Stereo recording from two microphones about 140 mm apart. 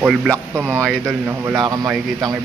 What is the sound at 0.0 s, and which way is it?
Speech, centre (ahead or behind).